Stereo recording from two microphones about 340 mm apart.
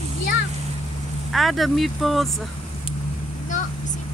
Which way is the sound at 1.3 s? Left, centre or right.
Centre.